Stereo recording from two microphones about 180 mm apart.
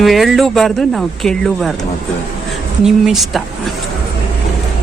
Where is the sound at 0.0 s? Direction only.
Centre (ahead or behind).